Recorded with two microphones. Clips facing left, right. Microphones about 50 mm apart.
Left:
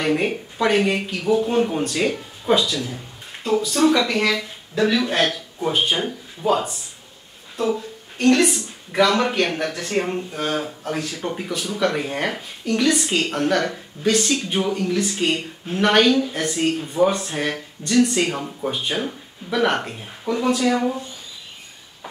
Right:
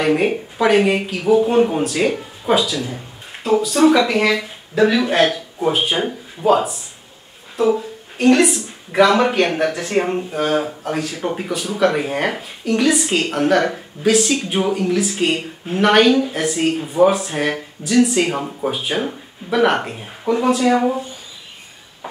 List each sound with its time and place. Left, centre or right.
0.0 s speech: centre
18.4 s speech: centre